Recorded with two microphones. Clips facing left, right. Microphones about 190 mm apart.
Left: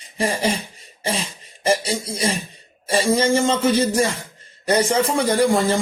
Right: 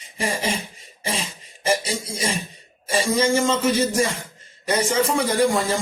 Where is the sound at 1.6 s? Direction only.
35° left (ahead or behind).